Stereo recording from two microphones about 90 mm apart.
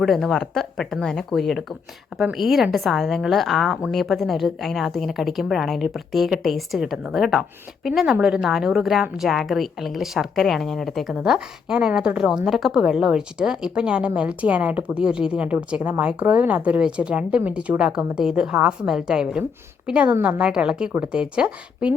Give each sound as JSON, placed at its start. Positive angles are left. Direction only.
{"t": 0.0, "sound": "a woman's voice", "side_deg": 0}